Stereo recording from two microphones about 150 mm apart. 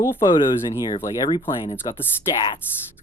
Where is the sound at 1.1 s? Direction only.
30° left (ahead or behind).